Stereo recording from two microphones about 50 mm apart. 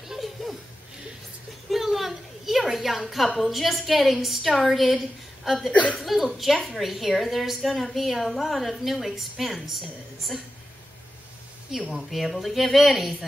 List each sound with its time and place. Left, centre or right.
0.1 s chuckle: centre
1.7 s a woman's voice: centre
5.7 s a woman's voice: left
5.9 s a woman's voice: centre
12.1 s a woman's voice: centre